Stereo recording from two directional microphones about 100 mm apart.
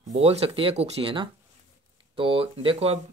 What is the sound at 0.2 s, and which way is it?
Speech, 90° right.